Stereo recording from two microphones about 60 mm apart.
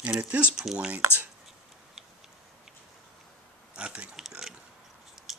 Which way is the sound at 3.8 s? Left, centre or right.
Right.